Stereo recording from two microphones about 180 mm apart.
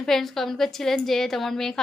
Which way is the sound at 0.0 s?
Centre (ahead or behind).